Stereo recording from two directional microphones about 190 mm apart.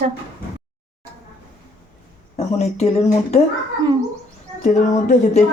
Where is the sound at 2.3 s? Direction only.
35° left (ahead or behind).